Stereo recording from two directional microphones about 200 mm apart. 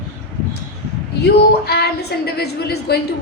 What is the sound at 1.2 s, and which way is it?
A woman's voice, 55° left (ahead or behind).